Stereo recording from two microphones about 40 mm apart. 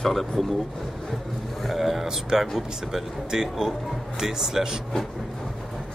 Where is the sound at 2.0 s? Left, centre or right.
Centre.